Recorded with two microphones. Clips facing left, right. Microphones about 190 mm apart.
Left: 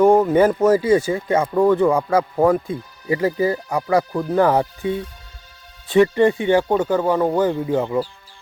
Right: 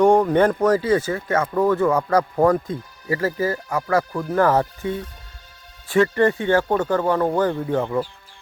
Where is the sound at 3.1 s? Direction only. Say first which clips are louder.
Left 3 dB; 20° left (ahead or behind).